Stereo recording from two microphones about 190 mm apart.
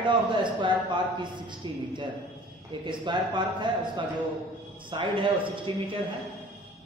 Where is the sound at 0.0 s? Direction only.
25° right (ahead or behind).